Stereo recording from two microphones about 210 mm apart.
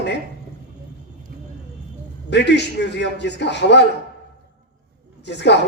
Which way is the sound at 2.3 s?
55° left (ahead or behind).